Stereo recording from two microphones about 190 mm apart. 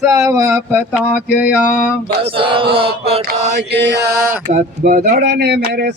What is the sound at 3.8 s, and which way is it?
Mantra, 65° right (ahead or behind).